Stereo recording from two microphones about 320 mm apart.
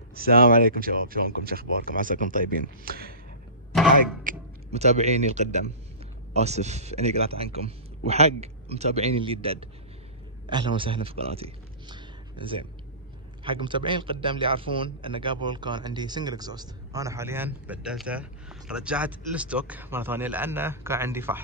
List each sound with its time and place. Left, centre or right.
0.1 s speech: right
4.2 s a man's voice: right; by 21.4 s centre